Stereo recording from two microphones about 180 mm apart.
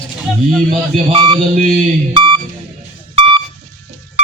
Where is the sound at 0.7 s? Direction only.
30° right (ahead or behind).